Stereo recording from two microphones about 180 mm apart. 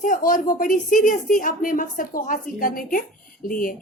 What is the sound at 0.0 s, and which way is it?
A woman's voice, 50° left (ahead or behind).